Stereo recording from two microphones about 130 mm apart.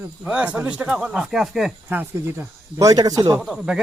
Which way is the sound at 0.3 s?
10° right (ahead or behind).